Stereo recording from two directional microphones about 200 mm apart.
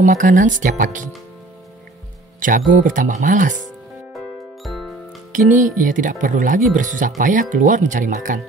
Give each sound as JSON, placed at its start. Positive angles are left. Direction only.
{"t": 0.0, "sound": "speech", "side_deg": -40}
{"t": 2.4, "sound": "speech", "side_deg": -40}
{"t": 5.5, "sound": "speech", "side_deg": -40}